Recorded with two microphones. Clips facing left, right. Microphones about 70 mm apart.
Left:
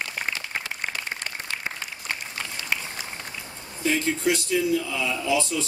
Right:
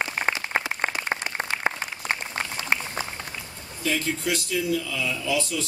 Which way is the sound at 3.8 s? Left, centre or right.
Left.